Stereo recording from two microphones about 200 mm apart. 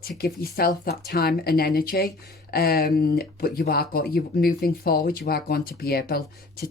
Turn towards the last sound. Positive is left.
turn(degrees=50)  # may be behind; listen again after turning